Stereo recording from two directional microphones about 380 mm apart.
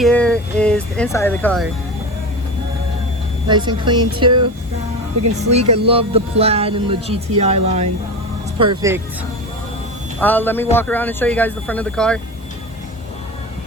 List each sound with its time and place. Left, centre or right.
0.0 s speech: centre
3.5 s speech: centre
5.5 s speech: centre
10.2 s speech: centre